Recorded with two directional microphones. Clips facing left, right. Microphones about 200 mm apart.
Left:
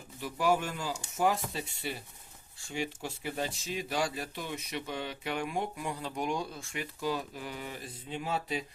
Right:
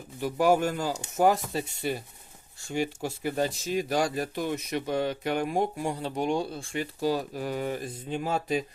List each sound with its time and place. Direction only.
0.2 s speech: 45° right (ahead or behind)